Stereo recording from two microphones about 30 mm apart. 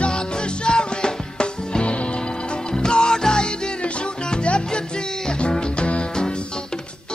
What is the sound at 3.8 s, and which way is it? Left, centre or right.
Music, left.